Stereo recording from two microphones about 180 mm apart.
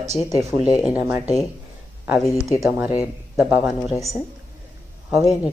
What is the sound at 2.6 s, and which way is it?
Speech, 10° right (ahead or behind).